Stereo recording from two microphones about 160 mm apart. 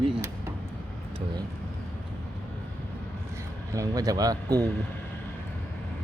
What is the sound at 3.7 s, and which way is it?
Speech, 20° right (ahead or behind).